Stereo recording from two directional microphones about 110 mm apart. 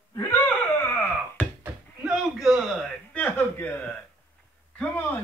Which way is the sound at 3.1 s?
15° left (ahead or behind).